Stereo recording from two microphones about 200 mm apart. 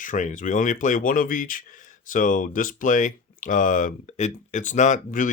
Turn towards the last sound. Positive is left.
turn(degrees=40)  # may be behind; listen again after turning